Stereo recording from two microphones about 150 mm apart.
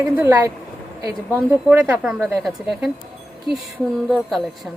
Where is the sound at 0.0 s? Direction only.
15° right (ahead or behind).